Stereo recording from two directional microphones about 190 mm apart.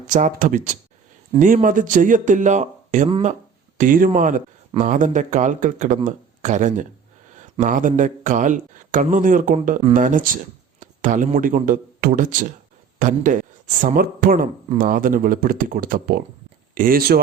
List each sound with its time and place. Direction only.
0.1 s speech: 40° right (ahead or behind)
3.8 s speech: 45° right (ahead or behind)